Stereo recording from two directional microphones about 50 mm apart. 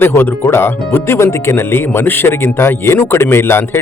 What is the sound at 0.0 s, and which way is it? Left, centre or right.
Speech, left.